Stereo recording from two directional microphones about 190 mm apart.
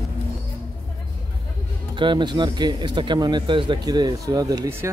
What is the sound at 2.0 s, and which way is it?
Speech, 25° right (ahead or behind).